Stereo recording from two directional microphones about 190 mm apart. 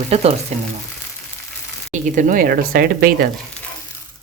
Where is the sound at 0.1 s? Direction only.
35° right (ahead or behind).